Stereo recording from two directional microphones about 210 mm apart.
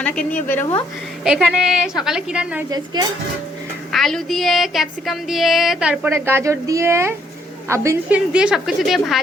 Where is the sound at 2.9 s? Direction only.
20° right (ahead or behind).